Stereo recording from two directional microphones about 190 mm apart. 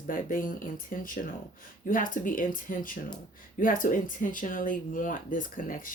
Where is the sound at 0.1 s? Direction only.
45° left (ahead or behind).